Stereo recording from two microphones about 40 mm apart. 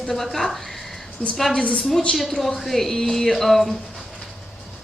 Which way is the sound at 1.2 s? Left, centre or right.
Left.